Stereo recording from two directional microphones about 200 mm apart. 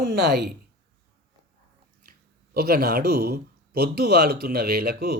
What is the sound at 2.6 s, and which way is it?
Speech, 50° right (ahead or behind).